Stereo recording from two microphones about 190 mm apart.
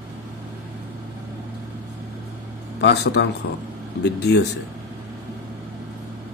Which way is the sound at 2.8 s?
60° left (ahead or behind).